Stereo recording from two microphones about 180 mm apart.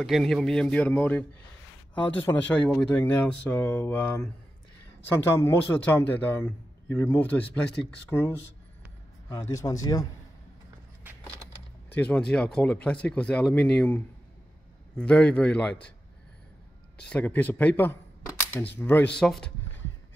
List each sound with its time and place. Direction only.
0.0 s a man's voice: centre (ahead or behind); by 10.0 s 20° left (ahead or behind)
11.1 s keys jangling: 10° right (ahead or behind)
11.9 s speech: 5° left (ahead or behind)
17.1 s a man's voice: 10° left (ahead or behind)